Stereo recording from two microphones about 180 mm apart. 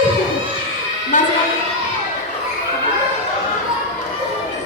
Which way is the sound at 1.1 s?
45° left (ahead or behind).